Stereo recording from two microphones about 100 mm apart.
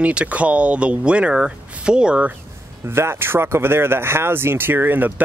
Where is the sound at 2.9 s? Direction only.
25° right (ahead or behind).